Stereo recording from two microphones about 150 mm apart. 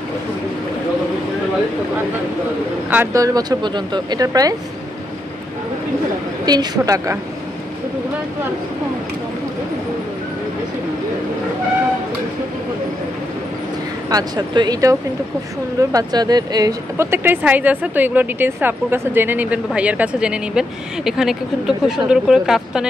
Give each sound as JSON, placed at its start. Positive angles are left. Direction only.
{"t": 2.9, "sound": "speech", "side_deg": -15}
{"t": 6.4, "sound": "speech", "side_deg": -25}
{"t": 14.0, "sound": "speech", "side_deg": -25}